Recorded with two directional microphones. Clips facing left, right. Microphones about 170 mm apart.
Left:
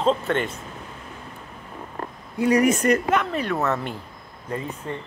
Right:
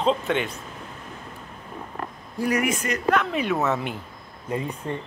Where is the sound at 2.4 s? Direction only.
30° left (ahead or behind).